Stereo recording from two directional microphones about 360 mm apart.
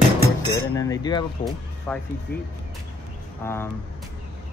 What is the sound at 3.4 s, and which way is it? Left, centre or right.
Speech, centre.